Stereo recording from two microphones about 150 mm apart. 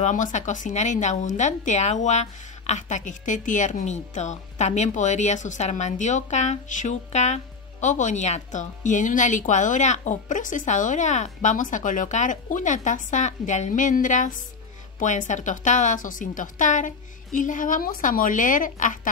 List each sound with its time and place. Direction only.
0.0 s a woman's voice: 55° left (ahead or behind)